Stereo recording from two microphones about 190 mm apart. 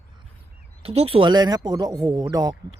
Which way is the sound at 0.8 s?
30° right (ahead or behind).